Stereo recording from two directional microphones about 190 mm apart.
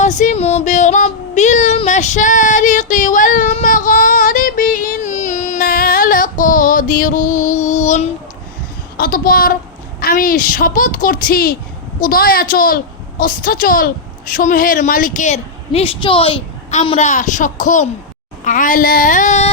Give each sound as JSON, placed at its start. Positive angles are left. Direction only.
{"t": 0.0, "sound": "child singing", "side_deg": 40}
{"t": 9.0, "sound": "a woman's voice", "side_deg": 50}